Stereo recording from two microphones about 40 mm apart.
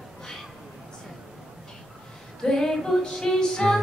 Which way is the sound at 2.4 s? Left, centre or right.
Centre.